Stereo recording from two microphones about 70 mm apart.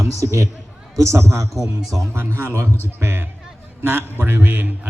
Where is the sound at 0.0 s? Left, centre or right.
Right.